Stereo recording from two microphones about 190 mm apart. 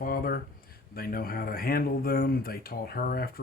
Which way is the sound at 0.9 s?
50° left (ahead or behind).